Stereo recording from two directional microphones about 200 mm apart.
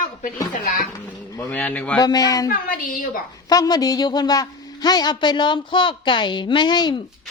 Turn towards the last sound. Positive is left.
turn(degrees=20)  # may be behind; listen again after turning